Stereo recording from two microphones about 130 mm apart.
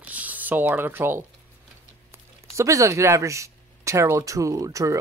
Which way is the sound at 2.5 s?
25° right (ahead or behind).